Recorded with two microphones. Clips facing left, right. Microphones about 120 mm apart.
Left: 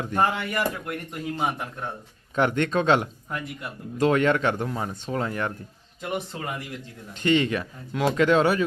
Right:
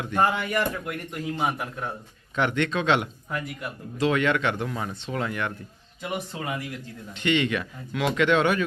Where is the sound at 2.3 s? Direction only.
40° left (ahead or behind).